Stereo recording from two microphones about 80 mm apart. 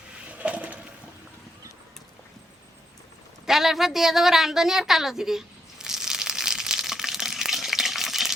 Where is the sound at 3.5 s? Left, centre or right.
Centre.